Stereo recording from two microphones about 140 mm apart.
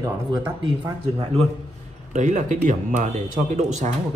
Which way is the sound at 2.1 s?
60° right (ahead or behind).